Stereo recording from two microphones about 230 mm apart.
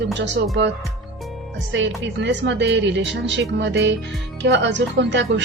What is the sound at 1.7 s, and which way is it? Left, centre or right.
Speech, right.